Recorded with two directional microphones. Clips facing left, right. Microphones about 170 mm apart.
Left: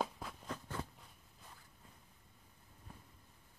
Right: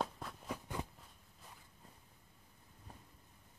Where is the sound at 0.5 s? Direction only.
15° right (ahead or behind).